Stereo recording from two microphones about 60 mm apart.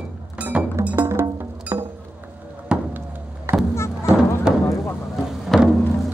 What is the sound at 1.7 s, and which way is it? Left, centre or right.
Music, right.